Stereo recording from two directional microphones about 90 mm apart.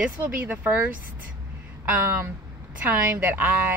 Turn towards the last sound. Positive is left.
turn(degrees=-20)  # may be behind; listen again after turning